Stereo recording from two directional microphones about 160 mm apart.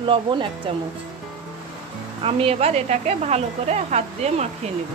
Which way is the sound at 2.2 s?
40° right (ahead or behind).